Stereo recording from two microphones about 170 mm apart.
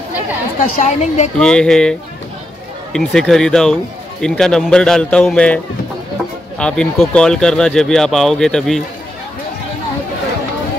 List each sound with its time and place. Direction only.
0.6 s a woman's voice: 45° left (ahead or behind)
1.4 s speech: 5° left (ahead or behind)
6.6 s speech: 5° left (ahead or behind)